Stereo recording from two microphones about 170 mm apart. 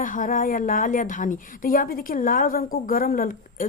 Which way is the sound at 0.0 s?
50° left (ahead or behind).